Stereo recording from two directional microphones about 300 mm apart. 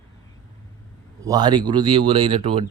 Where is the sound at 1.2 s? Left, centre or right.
Centre.